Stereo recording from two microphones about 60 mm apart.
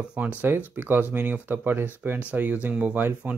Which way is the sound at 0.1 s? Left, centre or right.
Right.